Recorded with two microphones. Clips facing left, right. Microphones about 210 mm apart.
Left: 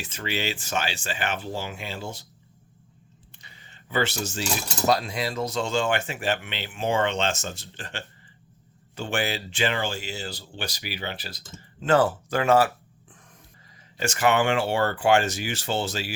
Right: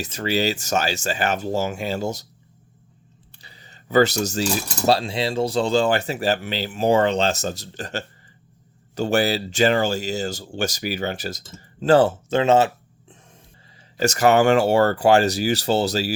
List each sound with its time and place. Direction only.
0.0 s speech: 40° right (ahead or behind)
3.3 s a sound: 35° right (ahead or behind)
4.9 s speech: 30° right (ahead or behind)
14.0 s speech: 40° right (ahead or behind)